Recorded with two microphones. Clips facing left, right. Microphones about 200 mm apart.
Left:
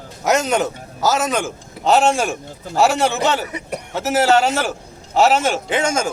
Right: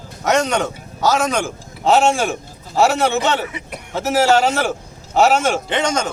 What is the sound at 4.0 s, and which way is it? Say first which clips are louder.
A man's voice: right 1 dB; centre (ahead or behind).